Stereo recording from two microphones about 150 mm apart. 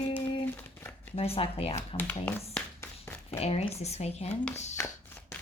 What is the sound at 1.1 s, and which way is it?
Speech, 40° left (ahead or behind).